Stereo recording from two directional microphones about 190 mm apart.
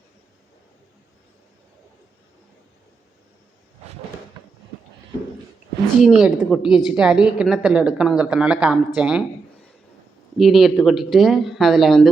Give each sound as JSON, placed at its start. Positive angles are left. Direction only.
{"t": 6.0, "sound": "a woman's voice", "side_deg": 0}
{"t": 10.3, "sound": "a woman's voice", "side_deg": 0}